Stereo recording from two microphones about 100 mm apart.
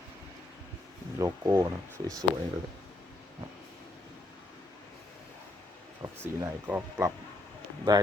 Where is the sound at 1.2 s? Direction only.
30° right (ahead or behind).